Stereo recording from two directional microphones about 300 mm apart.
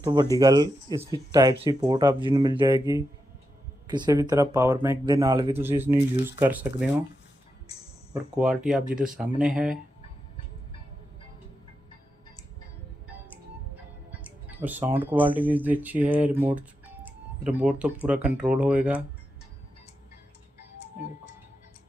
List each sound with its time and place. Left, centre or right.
0.0 s speech: centre
8.1 s speech: centre
14.3 s speech: centre